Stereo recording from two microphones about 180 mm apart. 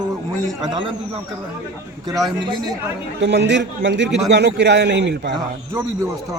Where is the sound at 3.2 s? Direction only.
75° right (ahead or behind).